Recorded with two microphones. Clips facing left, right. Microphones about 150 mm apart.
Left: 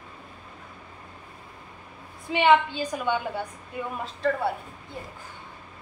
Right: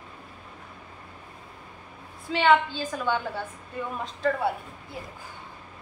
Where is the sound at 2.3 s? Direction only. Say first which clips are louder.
Left 1 dB; 20° left (ahead or behind).